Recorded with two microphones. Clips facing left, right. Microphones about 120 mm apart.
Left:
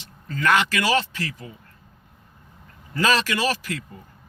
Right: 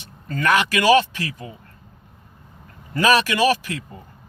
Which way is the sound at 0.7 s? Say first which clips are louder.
Right 6 dB; 15° right (ahead or behind).